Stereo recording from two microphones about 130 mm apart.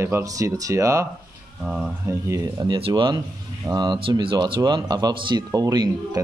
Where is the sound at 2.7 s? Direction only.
40° right (ahead or behind).